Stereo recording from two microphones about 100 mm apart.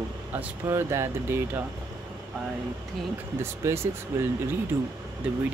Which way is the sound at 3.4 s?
25° right (ahead or behind).